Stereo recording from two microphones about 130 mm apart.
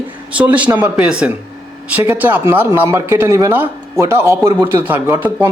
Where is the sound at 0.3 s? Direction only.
10° right (ahead or behind).